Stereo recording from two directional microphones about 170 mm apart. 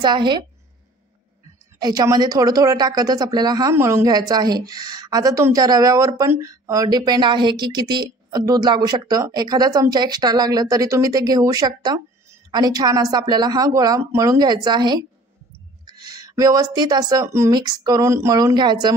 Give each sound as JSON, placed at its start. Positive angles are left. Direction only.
{"t": 0.0, "sound": "a woman's voice", "side_deg": -25}
{"t": 1.8, "sound": "a woman's voice", "side_deg": -20}